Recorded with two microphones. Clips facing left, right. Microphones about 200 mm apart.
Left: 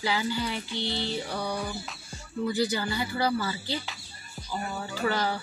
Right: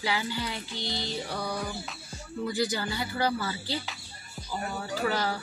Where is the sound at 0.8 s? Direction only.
35° right (ahead or behind).